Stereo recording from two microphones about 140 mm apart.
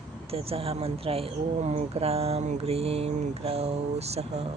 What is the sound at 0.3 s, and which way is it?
Mantra, 45° right (ahead or behind).